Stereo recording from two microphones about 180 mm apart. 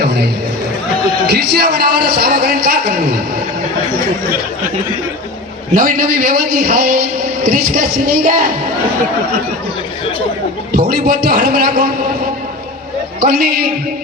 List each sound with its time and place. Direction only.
1.3 s a man's voice: 65° right (ahead or behind)
5.7 s a man's voice: 50° right (ahead or behind)
10.7 s a man's voice: 60° right (ahead or behind)
13.1 s a man's voice: 55° right (ahead or behind)